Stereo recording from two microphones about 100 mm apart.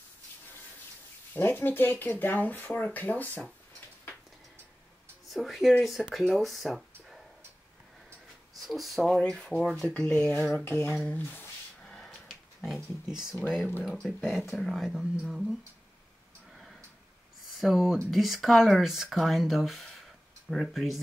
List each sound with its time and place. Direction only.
1.3 s speech: 20° left (ahead or behind)
5.3 s speech: centre (ahead or behind)
8.5 s speech: centre (ahead or behind)
10.6 s a sound: 25° left (ahead or behind)
10.9 s speech: 5° left (ahead or behind)
11.1 s speech: 15° left (ahead or behind)
11.8 s a sound: 5° left (ahead or behind)
14.0 s speech: 5° right (ahead or behind)
17.6 s speech: 5° right (ahead or behind)